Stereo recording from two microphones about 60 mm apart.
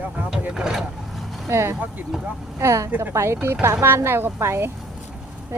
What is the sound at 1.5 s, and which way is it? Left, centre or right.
A woman's voice, right.